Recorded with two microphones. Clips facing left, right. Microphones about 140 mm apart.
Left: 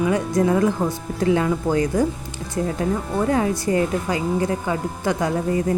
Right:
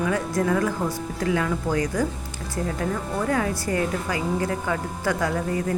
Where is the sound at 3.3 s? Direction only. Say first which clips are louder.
Left 4 dB; 25° left (ahead or behind).